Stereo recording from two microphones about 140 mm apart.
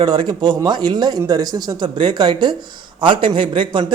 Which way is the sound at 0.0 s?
30° right (ahead or behind).